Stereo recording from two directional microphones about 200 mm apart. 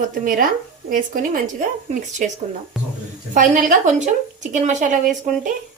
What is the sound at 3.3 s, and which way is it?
A woman's voice, 40° right (ahead or behind).